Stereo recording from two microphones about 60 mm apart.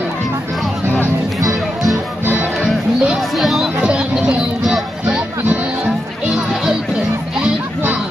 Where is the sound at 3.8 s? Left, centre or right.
Centre.